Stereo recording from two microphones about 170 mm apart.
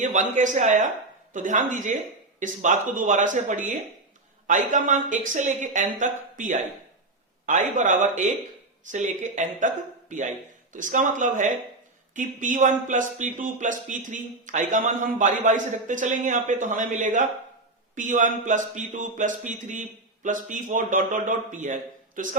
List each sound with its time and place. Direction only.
0.0 s a man's voice: 45° right (ahead or behind)